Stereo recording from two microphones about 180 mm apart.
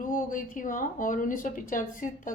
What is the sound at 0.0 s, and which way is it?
A woman's voice, 50° left (ahead or behind).